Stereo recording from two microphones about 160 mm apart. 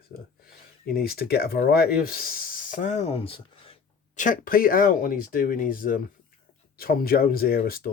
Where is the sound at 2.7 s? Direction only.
50° left (ahead or behind).